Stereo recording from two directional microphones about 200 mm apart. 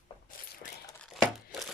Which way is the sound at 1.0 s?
Centre (ahead or behind).